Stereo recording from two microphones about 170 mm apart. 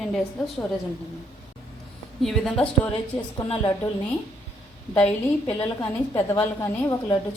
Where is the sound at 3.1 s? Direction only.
25° left (ahead or behind).